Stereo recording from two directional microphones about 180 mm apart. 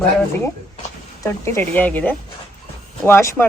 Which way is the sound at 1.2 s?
15° left (ahead or behind).